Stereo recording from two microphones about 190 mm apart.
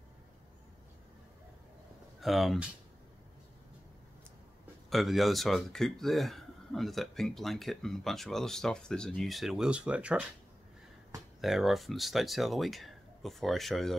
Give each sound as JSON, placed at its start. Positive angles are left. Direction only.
{"t": 2.1, "sound": "speech", "side_deg": 0}
{"t": 4.8, "sound": "speech", "side_deg": 0}
{"t": 11.4, "sound": "speech", "side_deg": 0}